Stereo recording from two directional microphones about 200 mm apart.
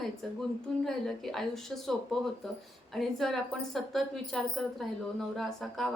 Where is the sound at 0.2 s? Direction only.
Centre (ahead or behind).